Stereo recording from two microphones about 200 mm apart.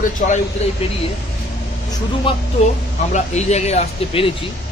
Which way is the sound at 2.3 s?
25° left (ahead or behind).